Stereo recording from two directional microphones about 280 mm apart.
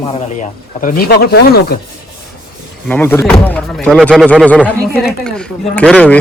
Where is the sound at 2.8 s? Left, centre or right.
Centre.